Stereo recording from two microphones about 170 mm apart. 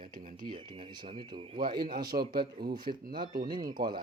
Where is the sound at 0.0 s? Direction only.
50° right (ahead or behind).